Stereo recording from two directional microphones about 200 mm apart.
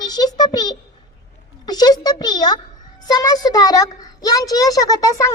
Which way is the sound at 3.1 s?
20° left (ahead or behind).